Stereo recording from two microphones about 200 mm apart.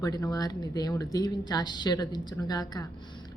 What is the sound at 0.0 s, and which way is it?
Speech, 20° left (ahead or behind).